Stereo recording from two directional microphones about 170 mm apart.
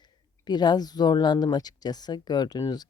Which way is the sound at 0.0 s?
25° left (ahead or behind).